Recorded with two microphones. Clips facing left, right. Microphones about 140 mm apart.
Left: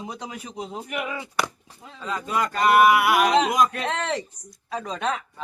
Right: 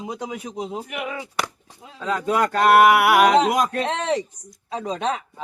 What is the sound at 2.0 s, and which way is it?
Speech, 65° right (ahead or behind).